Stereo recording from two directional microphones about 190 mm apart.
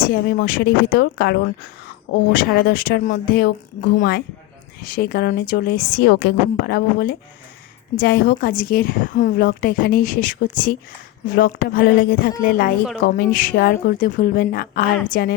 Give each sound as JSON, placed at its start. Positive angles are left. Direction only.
{"t": 0.0, "sound": "a woman's voice", "side_deg": 50}